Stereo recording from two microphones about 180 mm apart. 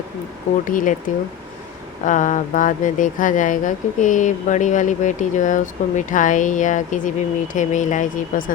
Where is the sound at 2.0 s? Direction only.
45° left (ahead or behind).